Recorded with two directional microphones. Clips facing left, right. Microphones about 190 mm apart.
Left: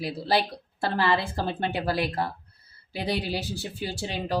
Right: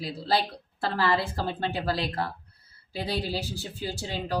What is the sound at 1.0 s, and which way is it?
A woman's voice, 20° left (ahead or behind).